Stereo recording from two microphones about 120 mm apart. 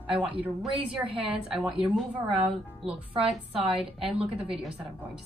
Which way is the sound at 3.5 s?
50° right (ahead or behind).